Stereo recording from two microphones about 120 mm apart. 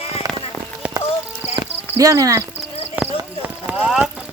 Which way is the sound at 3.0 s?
15° right (ahead or behind).